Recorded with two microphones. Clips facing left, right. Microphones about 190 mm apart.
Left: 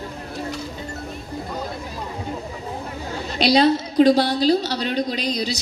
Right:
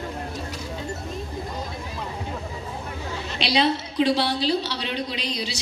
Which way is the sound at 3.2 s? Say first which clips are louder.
Left 6 dB; 40° left (ahead or behind).